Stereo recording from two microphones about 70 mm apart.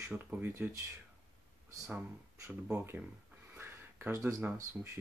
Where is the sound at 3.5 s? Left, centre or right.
Right.